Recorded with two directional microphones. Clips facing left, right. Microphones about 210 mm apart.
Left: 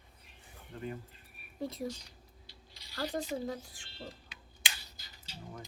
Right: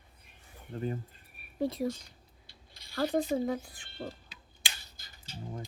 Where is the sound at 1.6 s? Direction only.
65° right (ahead or behind).